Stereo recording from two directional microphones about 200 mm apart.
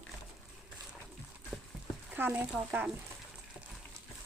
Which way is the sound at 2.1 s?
10° right (ahead or behind).